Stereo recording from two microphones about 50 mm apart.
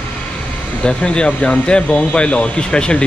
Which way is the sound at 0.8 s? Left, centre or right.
Centre.